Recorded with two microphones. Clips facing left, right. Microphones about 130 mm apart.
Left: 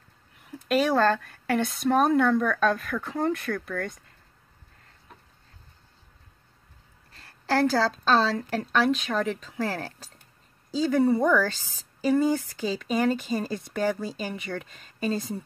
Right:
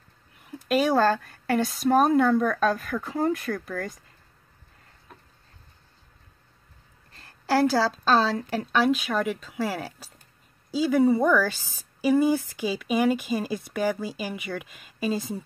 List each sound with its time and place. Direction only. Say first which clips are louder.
0.5 s a woman's voice: right 1 dB; centre (ahead or behind)
7.1 s a woman's voice: right 2 dB; centre (ahead or behind)